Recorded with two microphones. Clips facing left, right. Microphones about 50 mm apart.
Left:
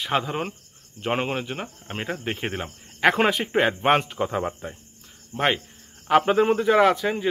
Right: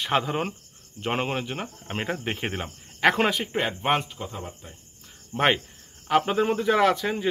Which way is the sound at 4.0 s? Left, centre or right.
Left.